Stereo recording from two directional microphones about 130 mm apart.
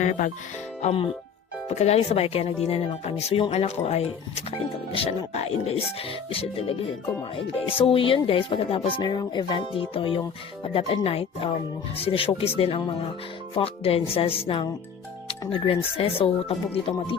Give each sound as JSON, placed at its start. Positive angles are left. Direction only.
{"t": 0.0, "sound": "speech", "side_deg": 75}
{"t": 0.8, "sound": "speech", "side_deg": 55}
{"t": 7.9, "sound": "speech", "side_deg": 40}